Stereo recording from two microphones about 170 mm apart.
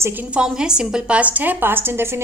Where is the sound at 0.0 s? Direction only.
10° right (ahead or behind).